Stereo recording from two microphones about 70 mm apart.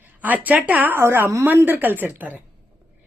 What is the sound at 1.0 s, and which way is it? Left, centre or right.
Speech, right.